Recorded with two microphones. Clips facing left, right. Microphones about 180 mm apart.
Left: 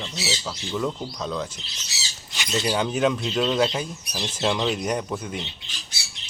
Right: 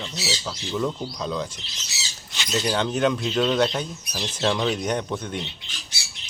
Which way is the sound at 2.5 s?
5° left (ahead or behind).